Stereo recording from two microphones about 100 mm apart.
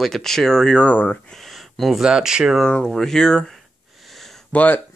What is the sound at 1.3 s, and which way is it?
Speech, centre (ahead or behind).